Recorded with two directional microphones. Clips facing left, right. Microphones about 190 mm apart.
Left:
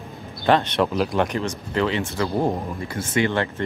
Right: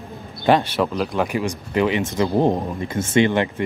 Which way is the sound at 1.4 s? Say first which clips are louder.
Right 3 dB; 15° right (ahead or behind).